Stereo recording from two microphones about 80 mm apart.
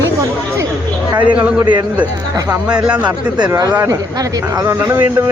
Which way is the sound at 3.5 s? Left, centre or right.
Right.